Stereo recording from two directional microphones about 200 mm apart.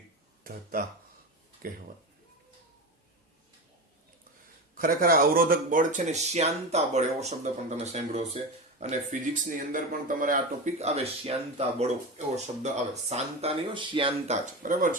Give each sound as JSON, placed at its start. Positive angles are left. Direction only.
{"t": 0.4, "sound": "speech", "side_deg": -45}
{"t": 4.8, "sound": "speech", "side_deg": -45}